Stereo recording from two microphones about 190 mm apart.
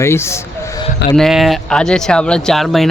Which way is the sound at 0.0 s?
15° left (ahead or behind).